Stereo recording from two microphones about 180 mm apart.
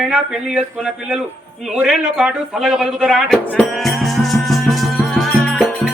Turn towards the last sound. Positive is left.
turn(degrees=0)  # may be behind; listen again after turning